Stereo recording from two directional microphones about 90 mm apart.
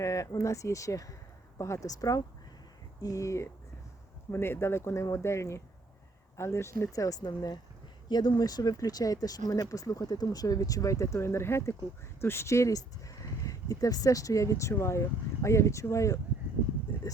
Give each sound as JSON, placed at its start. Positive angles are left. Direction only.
{"t": 0.0, "sound": "speech", "side_deg": 35}